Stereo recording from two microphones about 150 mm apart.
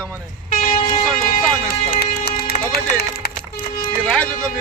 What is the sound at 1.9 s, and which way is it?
Run, 80° left.